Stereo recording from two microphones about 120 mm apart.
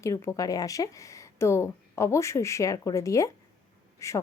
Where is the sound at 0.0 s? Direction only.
25° left (ahead or behind).